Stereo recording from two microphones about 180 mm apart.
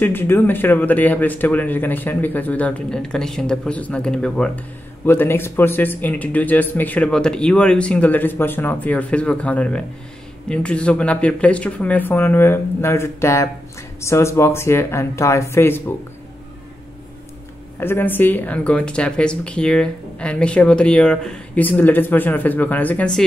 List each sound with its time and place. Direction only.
0.0 s speech: 10° left (ahead or behind)
17.7 s speech: 10° left (ahead or behind)